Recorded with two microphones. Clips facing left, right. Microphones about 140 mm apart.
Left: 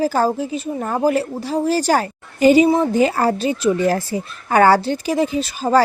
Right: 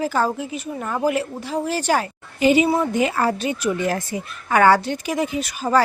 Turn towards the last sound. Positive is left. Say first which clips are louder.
# left 3 dB
turn(degrees=30)  # may be behind; listen again after turning